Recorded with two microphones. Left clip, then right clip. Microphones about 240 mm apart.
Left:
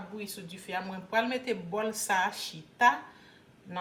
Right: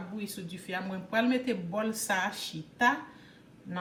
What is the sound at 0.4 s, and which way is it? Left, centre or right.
Speech, left.